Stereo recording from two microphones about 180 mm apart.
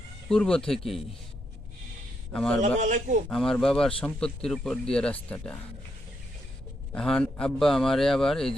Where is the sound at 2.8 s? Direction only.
45° right (ahead or behind).